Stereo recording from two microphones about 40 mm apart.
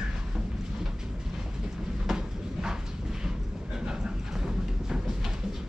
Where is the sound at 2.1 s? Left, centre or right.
Centre.